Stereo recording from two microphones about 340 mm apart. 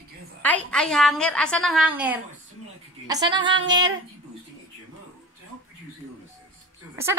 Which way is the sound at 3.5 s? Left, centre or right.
Right.